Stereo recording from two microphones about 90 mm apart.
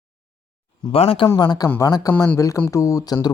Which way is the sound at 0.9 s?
90° left.